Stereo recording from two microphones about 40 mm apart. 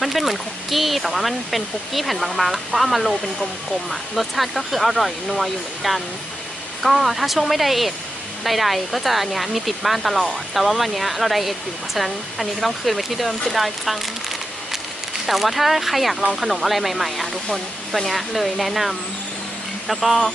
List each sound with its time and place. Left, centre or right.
0.0 s speech: centre